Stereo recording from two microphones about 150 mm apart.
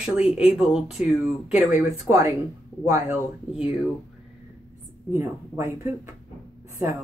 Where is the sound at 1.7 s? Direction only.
20° right (ahead or behind).